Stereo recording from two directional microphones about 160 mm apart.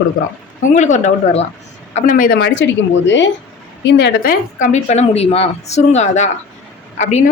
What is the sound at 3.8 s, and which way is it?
Speech, 90° left.